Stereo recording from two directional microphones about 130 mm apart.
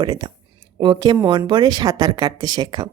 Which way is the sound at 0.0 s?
35° right (ahead or behind).